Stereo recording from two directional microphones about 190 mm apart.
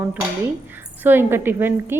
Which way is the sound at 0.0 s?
5° right (ahead or behind).